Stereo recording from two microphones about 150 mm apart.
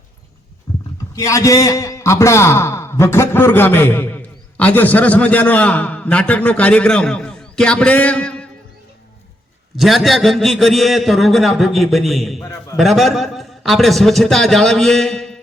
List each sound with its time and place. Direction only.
0.7 s heart sounds: 20° left (ahead or behind)
1.1 s a man's voice: 20° left (ahead or behind)
9.7 s a man's voice: centre (ahead or behind)